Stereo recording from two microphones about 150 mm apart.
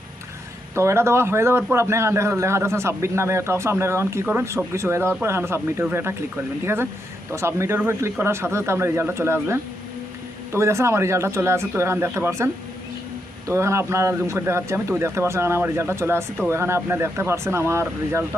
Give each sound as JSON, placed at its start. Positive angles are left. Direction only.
{"t": 0.8, "sound": "a man's voice", "side_deg": -15}
{"t": 13.5, "sound": "a man's voice", "side_deg": -20}